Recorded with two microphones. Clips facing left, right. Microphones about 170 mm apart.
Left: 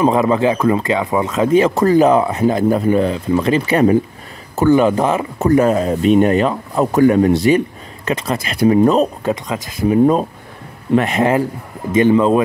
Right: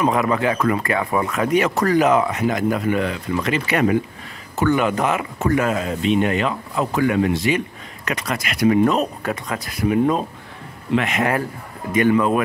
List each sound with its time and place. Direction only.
0.0 s speech: 25° left (ahead or behind)